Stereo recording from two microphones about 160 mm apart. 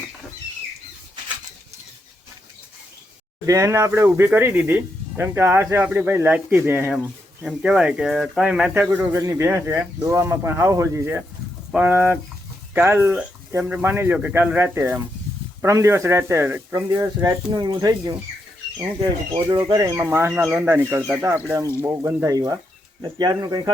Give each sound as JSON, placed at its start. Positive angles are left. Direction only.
{"t": 3.4, "sound": "speech", "side_deg": -20}
{"t": 19.5, "sound": "speech", "side_deg": -25}
{"t": 20.0, "sound": "speech", "side_deg": -15}